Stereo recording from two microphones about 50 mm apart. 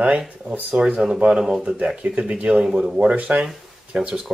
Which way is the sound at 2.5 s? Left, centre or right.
Centre.